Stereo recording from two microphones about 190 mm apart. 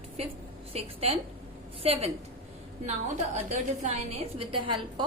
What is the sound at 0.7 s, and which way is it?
A woman's voice, 30° right (ahead or behind).